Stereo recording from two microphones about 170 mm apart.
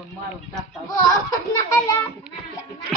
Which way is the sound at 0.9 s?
20° left (ahead or behind).